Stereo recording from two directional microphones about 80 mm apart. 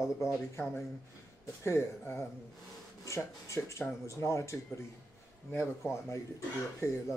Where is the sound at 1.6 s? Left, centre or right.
Left.